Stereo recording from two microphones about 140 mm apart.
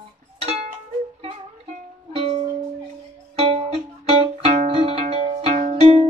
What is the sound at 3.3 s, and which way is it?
Music, 40° right (ahead or behind).